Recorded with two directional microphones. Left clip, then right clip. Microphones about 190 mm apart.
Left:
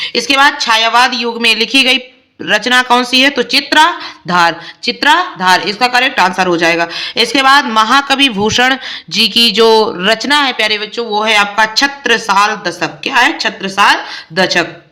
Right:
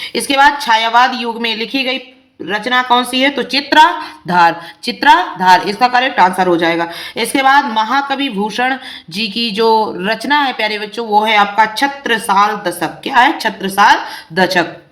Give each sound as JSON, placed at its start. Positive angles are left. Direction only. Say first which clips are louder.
{"t": 0.0, "sound": "speech", "louder": "left 1 dB", "side_deg": 15}
{"t": 3.5, "sound": "speech", "louder": "right 4 dB", "side_deg": 15}